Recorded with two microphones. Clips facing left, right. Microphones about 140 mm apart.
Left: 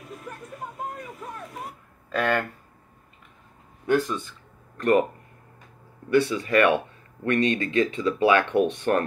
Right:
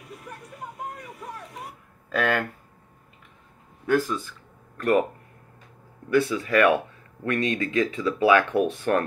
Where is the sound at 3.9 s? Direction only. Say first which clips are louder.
Even; centre (ahead or behind).